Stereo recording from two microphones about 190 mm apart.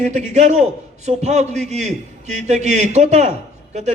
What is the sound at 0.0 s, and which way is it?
A man's voice, 35° right (ahead or behind).